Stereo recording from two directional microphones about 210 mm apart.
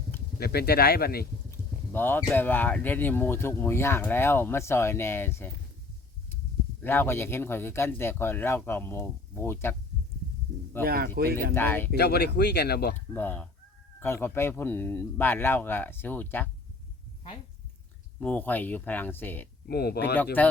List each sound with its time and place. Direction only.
0.3 s speech: 50° left (ahead or behind)
1.5 s speech: 10° left (ahead or behind)
6.8 s speech: 10° left (ahead or behind)
10.8 s speech: 45° right (ahead or behind)
11.5 s speech: 10° left (ahead or behind)
11.9 s speech: 50° left (ahead or behind)
13.1 s speech: 10° left (ahead or behind)
18.2 s speech: 10° left (ahead or behind)
19.6 s speech: 50° left (ahead or behind)
20.4 s speech: 10° left (ahead or behind)